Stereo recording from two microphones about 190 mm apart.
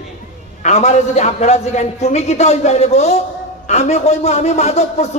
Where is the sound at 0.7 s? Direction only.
35° left (ahead or behind).